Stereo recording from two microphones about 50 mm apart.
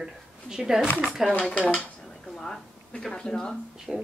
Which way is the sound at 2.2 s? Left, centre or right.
Centre.